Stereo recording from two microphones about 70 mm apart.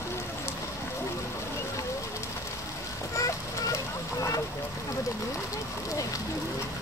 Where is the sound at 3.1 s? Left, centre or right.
Left.